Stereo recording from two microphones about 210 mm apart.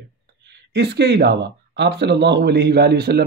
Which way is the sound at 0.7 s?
50° right (ahead or behind).